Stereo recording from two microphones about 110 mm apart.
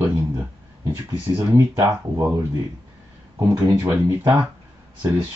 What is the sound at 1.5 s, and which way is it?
Speech, 25° right (ahead or behind).